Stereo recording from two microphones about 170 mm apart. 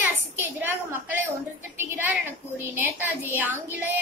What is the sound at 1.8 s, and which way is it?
A woman's voice, 10° right (ahead or behind).